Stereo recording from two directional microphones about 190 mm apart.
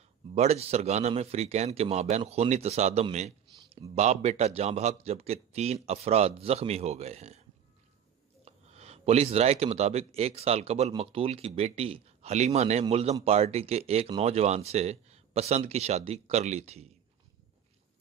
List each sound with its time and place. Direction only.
0.3 s speech: 35° right (ahead or behind)
3.4 s a sound: 20° right (ahead or behind)
3.9 s speech: 35° right (ahead or behind)
8.5 s speech: 35° right (ahead or behind)